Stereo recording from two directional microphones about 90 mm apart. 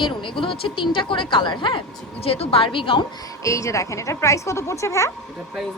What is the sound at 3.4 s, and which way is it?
A woman's voice, 35° left (ahead or behind).